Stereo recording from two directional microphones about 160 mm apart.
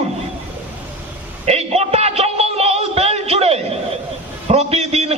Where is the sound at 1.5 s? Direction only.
40° right (ahead or behind).